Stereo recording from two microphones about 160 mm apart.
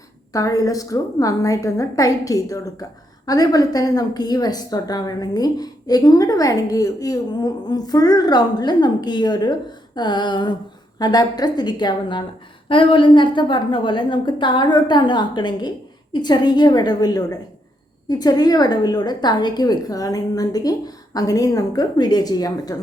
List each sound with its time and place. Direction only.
0.3 s a woman's voice: 20° left (ahead or behind)